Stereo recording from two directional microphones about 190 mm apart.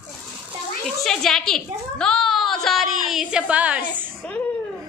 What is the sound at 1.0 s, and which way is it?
A woman's voice, centre (ahead or behind).